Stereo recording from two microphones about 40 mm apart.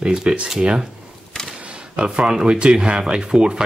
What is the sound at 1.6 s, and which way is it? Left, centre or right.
Speech, right.